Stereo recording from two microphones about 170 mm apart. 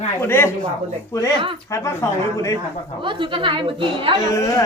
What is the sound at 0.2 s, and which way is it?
Speech, 15° left (ahead or behind).